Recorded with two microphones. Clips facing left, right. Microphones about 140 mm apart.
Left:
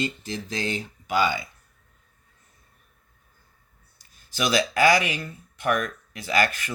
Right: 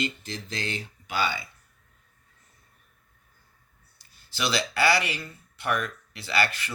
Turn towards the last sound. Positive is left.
turn(degrees=45)  # may be behind; listen again after turning